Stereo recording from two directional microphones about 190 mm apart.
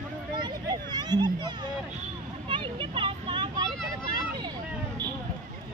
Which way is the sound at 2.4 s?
25° right (ahead or behind).